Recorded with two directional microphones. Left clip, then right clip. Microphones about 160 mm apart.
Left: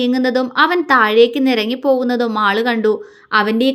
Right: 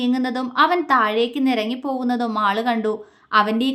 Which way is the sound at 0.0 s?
20° left (ahead or behind).